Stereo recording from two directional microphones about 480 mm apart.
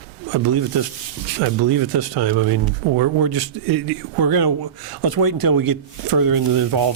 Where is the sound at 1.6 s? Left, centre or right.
Right.